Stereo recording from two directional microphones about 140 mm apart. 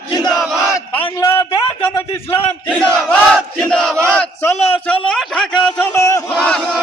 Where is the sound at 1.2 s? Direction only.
20° left (ahead or behind).